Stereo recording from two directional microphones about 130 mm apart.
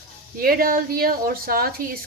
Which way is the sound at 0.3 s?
90° right.